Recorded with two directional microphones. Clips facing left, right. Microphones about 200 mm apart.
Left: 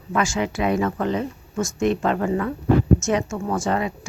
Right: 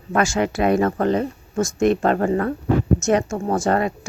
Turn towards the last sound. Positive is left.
turn(degrees=-50)  # may be behind; listen again after turning